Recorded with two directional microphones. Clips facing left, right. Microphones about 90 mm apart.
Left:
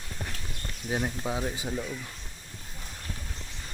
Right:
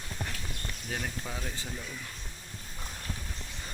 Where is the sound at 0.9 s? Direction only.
20° left (ahead or behind).